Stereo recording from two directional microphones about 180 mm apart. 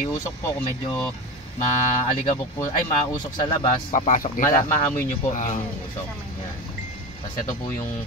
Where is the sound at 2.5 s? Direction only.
20° left (ahead or behind).